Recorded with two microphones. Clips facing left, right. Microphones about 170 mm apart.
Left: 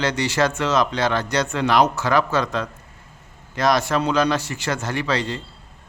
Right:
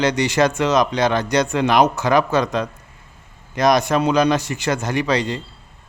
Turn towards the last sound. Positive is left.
turn(degrees=-15)  # may be behind; listen again after turning